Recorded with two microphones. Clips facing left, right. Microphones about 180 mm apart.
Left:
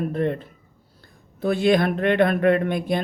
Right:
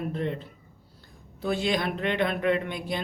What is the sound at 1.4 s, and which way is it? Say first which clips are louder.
A woman's voice: left 8 dB; 55° left (ahead or behind).